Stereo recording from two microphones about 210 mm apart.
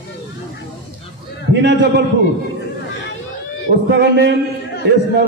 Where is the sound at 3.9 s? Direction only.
55° right (ahead or behind).